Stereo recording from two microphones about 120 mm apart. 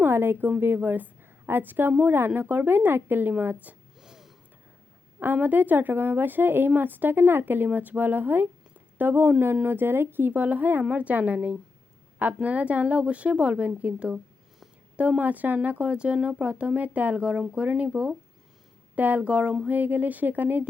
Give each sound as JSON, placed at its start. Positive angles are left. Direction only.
{"t": 0.0, "sound": "a woman's voice", "side_deg": -15}
{"t": 5.2, "sound": "speech", "side_deg": -15}